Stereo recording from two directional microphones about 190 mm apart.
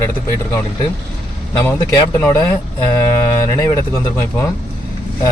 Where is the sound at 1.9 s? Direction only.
15° left (ahead or behind).